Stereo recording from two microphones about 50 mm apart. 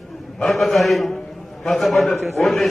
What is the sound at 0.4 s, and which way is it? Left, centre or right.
A man's voice, centre.